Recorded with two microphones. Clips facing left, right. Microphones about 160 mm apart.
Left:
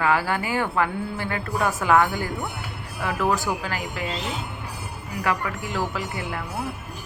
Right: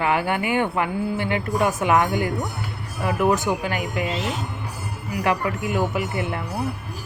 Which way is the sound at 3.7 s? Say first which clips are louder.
Right 4 dB; 30° left (ahead or behind).